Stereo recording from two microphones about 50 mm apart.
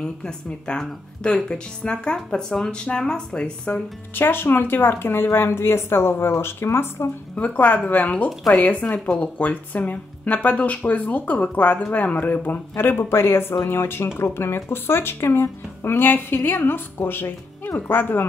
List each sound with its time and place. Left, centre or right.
0.0 s speech: centre
4.1 s speech: left
7.3 s speech: left